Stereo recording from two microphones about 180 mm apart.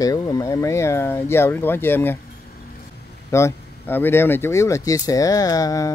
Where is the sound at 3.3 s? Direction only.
15° left (ahead or behind).